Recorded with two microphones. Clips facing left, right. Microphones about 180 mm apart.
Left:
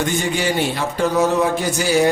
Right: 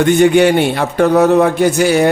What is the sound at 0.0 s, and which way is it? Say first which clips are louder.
Speech: right 12 dB; 60° right (ahead or behind).